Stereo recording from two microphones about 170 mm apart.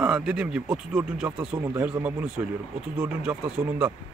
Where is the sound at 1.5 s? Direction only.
20° right (ahead or behind).